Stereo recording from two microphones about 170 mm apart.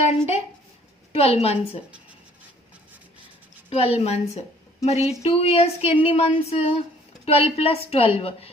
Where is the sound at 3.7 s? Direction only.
35° left (ahead or behind).